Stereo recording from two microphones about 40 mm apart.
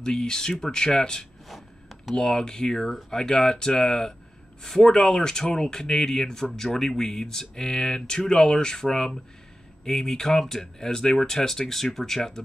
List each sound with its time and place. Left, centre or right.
0.0 s speech: left
1.5 s a sound: centre
2.1 s speech: centre